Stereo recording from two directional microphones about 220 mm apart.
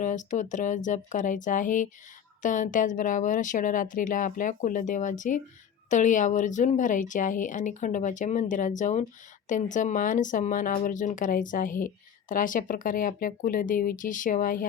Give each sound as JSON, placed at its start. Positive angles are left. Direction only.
{"t": 0.0, "sound": "speech", "side_deg": 35}